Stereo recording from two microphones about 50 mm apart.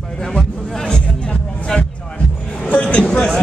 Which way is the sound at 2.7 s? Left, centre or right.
Left.